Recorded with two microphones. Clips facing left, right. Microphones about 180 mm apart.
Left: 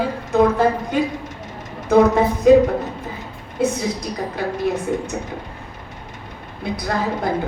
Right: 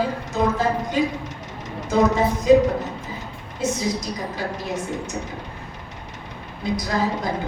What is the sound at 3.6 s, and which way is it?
A woman's voice, 60° left (ahead or behind).